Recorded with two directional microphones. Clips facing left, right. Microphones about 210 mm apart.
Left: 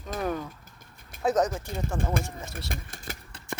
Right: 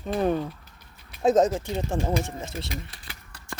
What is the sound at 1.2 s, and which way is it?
Speech, 25° right (ahead or behind).